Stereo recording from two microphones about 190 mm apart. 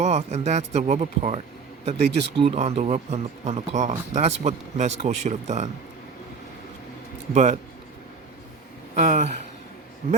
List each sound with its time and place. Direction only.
0.0 s speech: 35° right (ahead or behind)
7.3 s speech: 40° right (ahead or behind)
9.0 s speech: 40° right (ahead or behind)